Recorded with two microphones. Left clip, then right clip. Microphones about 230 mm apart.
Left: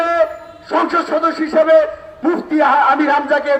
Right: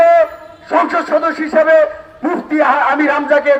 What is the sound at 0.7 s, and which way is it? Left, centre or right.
A man's voice, right.